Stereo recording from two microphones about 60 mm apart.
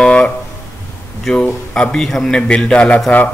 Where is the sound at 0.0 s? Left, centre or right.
Centre.